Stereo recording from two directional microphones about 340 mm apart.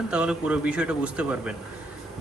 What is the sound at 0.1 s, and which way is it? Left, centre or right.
Speech, centre.